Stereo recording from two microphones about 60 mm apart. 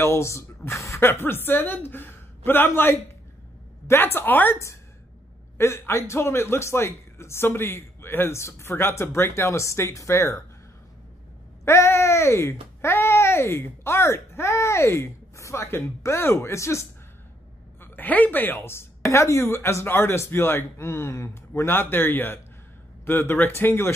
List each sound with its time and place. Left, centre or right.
0.0 s speech: left
1.0 s a woman's voice: left
5.6 s a man's voice: left
8.4 s a man's voice: left
11.6 s a child's voice: left
17.7 s a woman's voice: left